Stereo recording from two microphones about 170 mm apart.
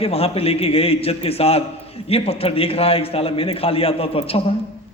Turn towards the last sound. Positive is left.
turn(degrees=35)  # may be behind; listen again after turning